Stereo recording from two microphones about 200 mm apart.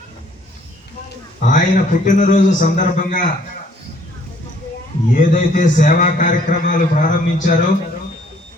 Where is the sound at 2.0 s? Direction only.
40° left (ahead or behind).